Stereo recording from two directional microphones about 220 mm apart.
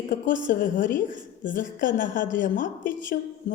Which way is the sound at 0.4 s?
35° left (ahead or behind).